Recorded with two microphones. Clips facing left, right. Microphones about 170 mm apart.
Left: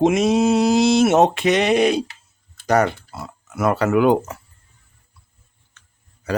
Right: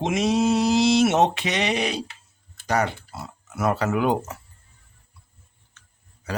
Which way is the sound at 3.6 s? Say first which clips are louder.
Left 5 dB; 65° left (ahead or behind).